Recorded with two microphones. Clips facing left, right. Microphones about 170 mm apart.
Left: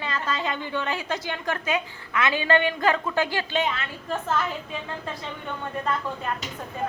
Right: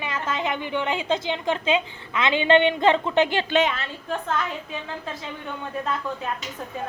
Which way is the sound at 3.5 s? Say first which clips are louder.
Right 4 dB; 80° right.